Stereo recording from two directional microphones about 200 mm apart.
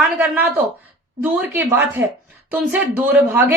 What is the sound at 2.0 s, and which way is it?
Speech, 60° right (ahead or behind).